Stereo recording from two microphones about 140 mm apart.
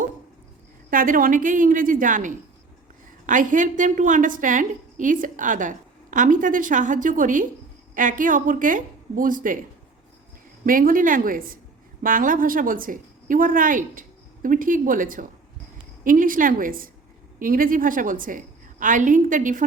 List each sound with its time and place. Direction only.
0.9 s a woman's voice: 80° right
10.7 s a woman's voice: 80° right
12.0 s a woman's voice: 75° right (ahead or behind)